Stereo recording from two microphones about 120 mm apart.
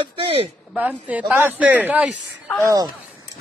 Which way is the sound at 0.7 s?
15° right (ahead or behind).